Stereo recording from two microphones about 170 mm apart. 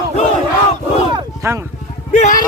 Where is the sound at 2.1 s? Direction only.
45° left (ahead or behind).